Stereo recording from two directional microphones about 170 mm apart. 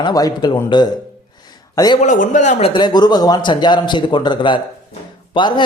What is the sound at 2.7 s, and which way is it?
A man's voice, 25° left (ahead or behind).